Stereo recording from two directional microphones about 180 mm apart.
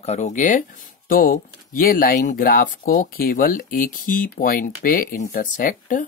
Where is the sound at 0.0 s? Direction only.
40° left (ahead or behind).